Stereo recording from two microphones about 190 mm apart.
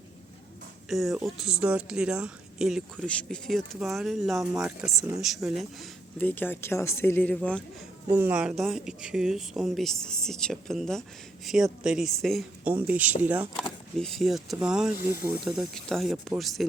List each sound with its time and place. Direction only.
0.9 s speech: centre (ahead or behind)
8.1 s speech: 10° right (ahead or behind)
13.9 s speech: centre (ahead or behind)